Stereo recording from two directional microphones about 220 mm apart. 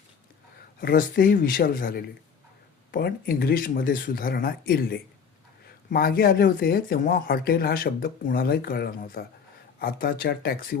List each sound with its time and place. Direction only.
0.8 s speech: 40° left (ahead or behind)